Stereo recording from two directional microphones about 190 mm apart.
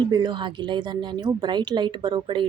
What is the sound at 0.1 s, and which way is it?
Speech, 25° right (ahead or behind).